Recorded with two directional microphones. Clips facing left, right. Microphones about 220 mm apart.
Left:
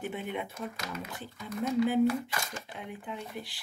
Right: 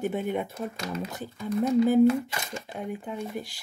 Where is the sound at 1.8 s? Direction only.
45° right (ahead or behind).